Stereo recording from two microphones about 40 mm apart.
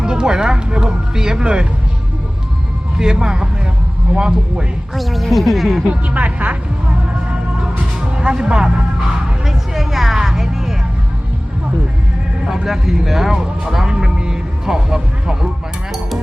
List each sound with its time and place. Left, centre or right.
0.0 s speech: centre
3.0 s speech: centre
4.9 s speech: centre
5.9 s speech: right
8.1 s speech: right
9.5 s music: centre
12.6 s speech: centre